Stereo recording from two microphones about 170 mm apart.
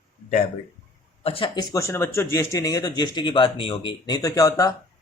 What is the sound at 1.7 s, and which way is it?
Speech, 15° left (ahead or behind).